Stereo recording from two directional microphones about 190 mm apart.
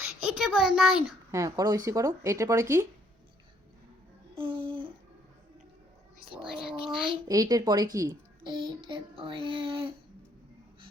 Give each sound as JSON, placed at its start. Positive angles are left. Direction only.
{"t": 0.3, "sound": "a child's voice", "side_deg": 0}
{"t": 1.3, "sound": "speech", "side_deg": -15}
{"t": 4.4, "sound": "a sound", "side_deg": -30}
{"t": 6.7, "sound": "a child's voice", "side_deg": -25}